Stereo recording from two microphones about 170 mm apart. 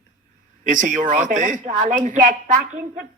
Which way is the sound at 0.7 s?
50° right (ahead or behind).